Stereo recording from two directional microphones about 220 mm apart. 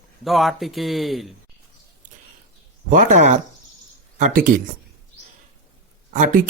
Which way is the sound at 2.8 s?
35° right (ahead or behind).